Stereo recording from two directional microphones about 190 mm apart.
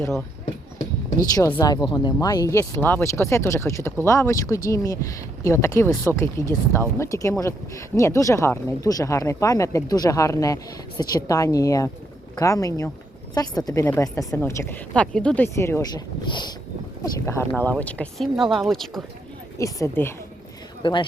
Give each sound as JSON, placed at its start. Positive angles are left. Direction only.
{"t": 1.4, "sound": "speech", "side_deg": 15}
{"t": 19.5, "sound": "speech", "side_deg": 15}
{"t": 20.8, "sound": "speech", "side_deg": 25}